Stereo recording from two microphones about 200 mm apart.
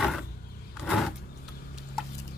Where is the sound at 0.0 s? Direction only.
Centre (ahead or behind).